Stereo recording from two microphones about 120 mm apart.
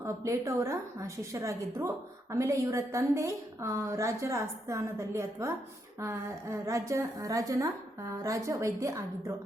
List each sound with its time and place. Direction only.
0.0 s a woman's voice: 25° right (ahead or behind)